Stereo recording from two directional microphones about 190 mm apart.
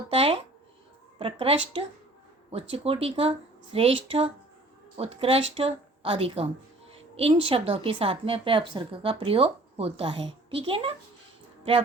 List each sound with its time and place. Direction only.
0.1 s a woman's voice: 30° right (ahead or behind)